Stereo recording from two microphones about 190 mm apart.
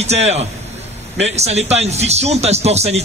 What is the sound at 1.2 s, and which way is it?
A man's voice, 35° right (ahead or behind).